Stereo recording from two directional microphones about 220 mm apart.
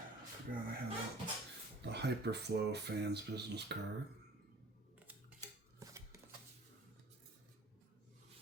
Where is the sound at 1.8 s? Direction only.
50° right (ahead or behind).